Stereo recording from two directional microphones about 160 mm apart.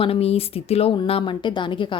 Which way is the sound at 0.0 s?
40° left (ahead or behind).